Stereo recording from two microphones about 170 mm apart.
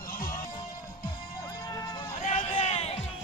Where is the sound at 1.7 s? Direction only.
25° left (ahead or behind).